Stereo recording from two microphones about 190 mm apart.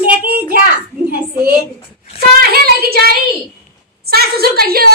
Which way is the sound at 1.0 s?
50° right (ahead or behind).